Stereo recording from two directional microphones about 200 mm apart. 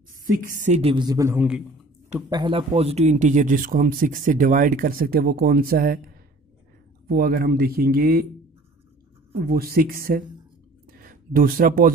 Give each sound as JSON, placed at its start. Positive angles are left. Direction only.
{"t": 0.2, "sound": "a woman's voice", "side_deg": -40}
{"t": 2.2, "sound": "speech", "side_deg": -20}
{"t": 7.1, "sound": "speech", "side_deg": -50}
{"t": 9.3, "sound": "speech", "side_deg": -50}
{"t": 10.9, "sound": "a sound", "side_deg": -45}